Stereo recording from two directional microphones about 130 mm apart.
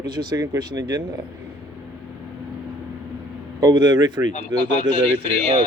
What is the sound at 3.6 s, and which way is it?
Speech, 35° right (ahead or behind).